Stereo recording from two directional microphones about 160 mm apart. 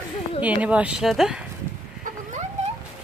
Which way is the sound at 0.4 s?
10° right (ahead or behind).